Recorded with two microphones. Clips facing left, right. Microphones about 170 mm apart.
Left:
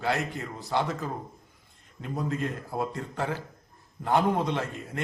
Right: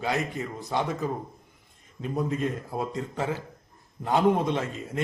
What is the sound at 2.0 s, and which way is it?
A man's voice, 20° right (ahead or behind).